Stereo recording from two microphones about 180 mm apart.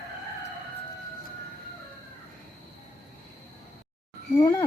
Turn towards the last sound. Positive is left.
turn(degrees=25)  # may be behind; listen again after turning